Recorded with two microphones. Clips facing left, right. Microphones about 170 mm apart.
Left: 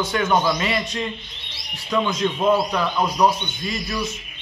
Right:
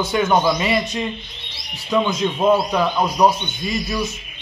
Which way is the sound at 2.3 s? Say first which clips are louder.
Right 4 dB; 20° right (ahead or behind).